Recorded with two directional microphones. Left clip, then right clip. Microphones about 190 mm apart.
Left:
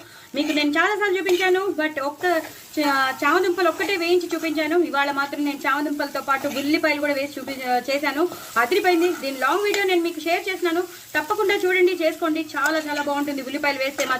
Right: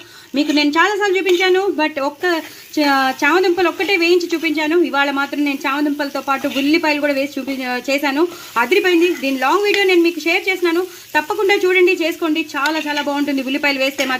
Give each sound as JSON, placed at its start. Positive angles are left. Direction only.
{"t": 0.3, "sound": "speech", "side_deg": -45}